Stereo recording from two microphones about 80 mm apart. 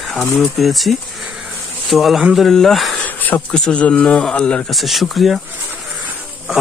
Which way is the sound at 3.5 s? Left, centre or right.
Centre.